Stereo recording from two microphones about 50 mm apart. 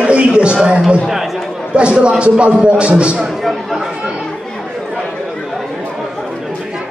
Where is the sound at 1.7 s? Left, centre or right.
Centre.